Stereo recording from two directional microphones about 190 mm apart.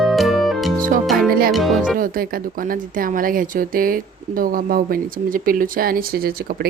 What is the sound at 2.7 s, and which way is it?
Speech, 45° right (ahead or behind).